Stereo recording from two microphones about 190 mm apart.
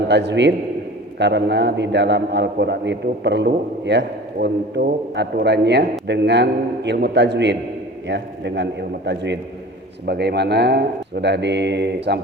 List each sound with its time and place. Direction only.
0.1 s a man's voice: 65° right (ahead or behind)